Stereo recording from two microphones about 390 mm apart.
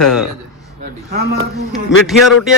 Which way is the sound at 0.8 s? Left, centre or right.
Right.